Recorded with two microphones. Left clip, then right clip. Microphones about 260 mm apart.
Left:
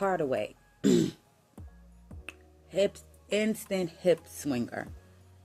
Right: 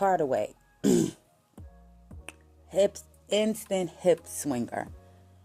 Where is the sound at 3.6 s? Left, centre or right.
Centre.